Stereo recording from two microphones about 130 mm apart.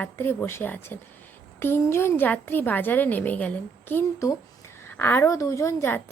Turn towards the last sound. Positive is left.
turn(degrees=15)  # may be behind; listen again after turning